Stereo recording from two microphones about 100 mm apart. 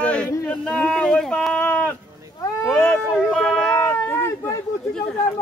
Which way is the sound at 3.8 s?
25° left (ahead or behind).